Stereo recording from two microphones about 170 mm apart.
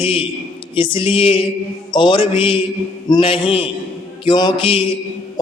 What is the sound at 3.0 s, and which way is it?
Speech, 30° left (ahead or behind).